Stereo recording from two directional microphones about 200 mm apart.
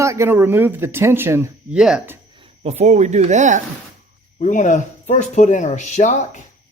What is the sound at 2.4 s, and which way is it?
Speech, 30° right (ahead or behind).